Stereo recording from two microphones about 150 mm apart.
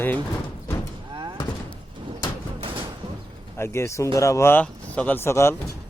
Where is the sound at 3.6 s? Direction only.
15° left (ahead or behind).